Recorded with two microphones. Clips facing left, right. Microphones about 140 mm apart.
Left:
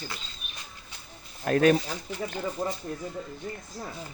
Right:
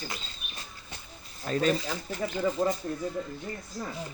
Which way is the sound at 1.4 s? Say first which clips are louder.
Left 5 dB; 65° left (ahead or behind).